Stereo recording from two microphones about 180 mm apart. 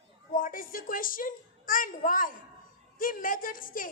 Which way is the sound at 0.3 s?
50° left (ahead or behind).